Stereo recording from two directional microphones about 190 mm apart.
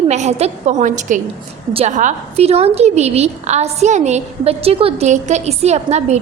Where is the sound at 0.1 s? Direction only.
35° right (ahead or behind).